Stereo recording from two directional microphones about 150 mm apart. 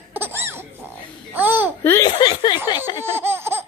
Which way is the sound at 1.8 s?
15° left (ahead or behind).